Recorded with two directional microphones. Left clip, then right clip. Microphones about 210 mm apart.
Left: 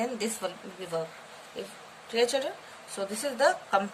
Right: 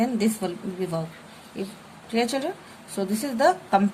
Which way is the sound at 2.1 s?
20° right (ahead or behind).